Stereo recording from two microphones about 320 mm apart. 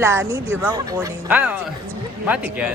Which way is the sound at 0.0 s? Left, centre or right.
Centre.